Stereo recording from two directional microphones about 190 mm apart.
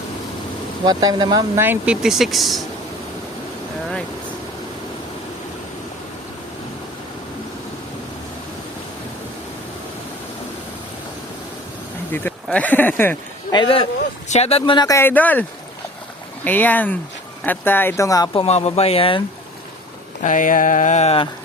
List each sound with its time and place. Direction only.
0.9 s speech: 20° right (ahead or behind)
1.6 s speech: 10° right (ahead or behind)
12.1 s speech: 10° left (ahead or behind)
13.5 s speech: 25° left (ahead or behind)
18.3 s a sound: 35° left (ahead or behind)
20.2 s a sound: 45° left (ahead or behind)